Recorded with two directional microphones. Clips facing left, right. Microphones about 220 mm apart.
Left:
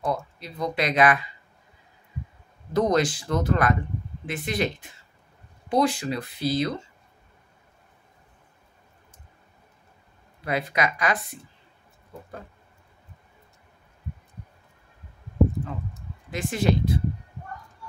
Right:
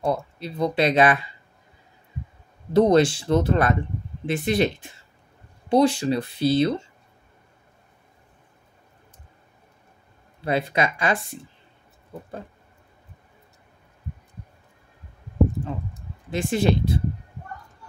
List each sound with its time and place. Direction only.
0.0 s speech: 30° right (ahead or behind)
2.7 s speech: 30° right (ahead or behind)
10.4 s speech: 30° right (ahead or behind)
16.3 s speech: 30° right (ahead or behind)